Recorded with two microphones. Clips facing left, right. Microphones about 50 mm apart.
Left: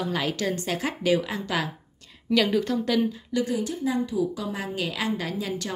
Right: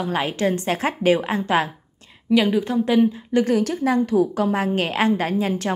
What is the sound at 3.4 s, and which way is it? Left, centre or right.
A woman's voice, right.